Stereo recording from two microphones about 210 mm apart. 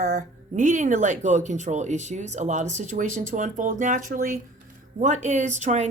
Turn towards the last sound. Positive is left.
turn(degrees=-35)  # may be behind; listen again after turning